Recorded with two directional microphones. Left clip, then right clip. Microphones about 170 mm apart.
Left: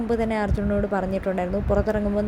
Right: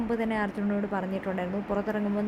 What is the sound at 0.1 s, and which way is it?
Speech, 15° left (ahead or behind).